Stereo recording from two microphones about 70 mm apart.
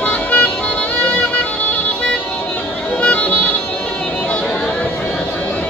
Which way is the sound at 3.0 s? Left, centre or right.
Left.